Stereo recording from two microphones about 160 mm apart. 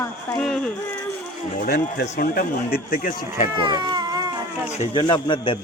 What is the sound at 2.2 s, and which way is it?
Speech, 65° left (ahead or behind).